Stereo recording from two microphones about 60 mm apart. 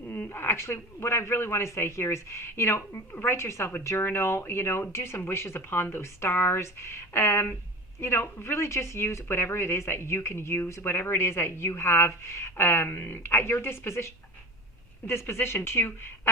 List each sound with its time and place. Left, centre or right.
0.1 s speech: left